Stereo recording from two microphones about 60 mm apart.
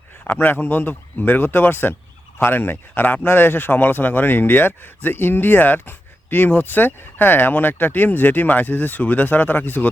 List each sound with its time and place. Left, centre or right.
0.3 s speech: left